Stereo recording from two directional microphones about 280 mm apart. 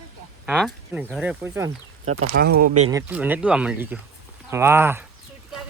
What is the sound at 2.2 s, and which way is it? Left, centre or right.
Speech, right.